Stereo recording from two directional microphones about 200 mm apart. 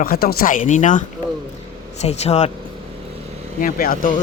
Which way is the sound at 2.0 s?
35° left (ahead or behind).